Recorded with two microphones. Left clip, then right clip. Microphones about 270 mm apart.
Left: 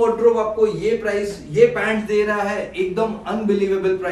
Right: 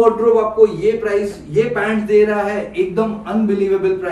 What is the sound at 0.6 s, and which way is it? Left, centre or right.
A man's voice, centre.